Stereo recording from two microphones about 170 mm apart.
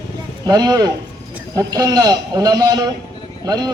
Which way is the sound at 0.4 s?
20° right (ahead or behind).